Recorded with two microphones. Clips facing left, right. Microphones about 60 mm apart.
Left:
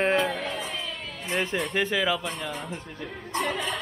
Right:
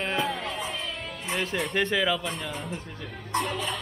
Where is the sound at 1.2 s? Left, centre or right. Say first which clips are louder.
Left 2 dB; centre.